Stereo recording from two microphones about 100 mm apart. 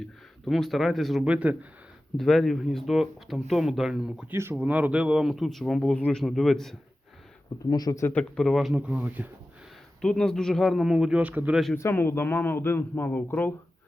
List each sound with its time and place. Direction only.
0.4 s speech: centre (ahead or behind)
1.3 s speech: 15° right (ahead or behind)
2.1 s speech: 5° left (ahead or behind)
4.3 s speech: 25° right (ahead or behind); by 6.7 s 5° left (ahead or behind)
7.7 s speech: 40° left (ahead or behind)
8.0 s speech: 10° left (ahead or behind)
8.7 s speech: 10° right (ahead or behind)
10.0 s speech: 5° left (ahead or behind); by 11.5 s 15° right (ahead or behind)
11.8 s speech: 25° left (ahead or behind)